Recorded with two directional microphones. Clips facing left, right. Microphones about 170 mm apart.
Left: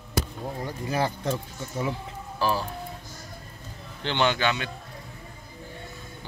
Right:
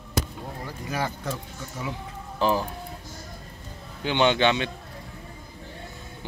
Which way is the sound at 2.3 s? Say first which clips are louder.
Right 3 dB; 20° right (ahead or behind).